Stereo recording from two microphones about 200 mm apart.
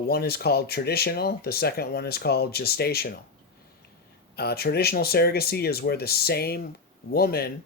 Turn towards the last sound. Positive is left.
turn(degrees=50)  # may be behind; listen again after turning